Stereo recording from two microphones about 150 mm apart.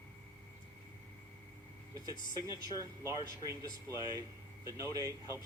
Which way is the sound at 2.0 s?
25° right (ahead or behind).